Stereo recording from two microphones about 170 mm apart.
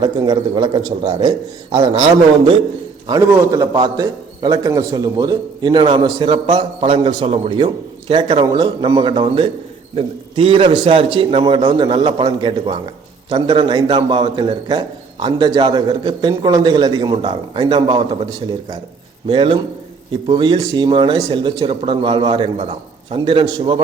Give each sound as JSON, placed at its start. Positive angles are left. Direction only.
{"t": 0.0, "sound": "a man's voice", "side_deg": -25}
{"t": 3.1, "sound": "a man's voice", "side_deg": -20}
{"t": 19.3, "sound": "a man's voice", "side_deg": -30}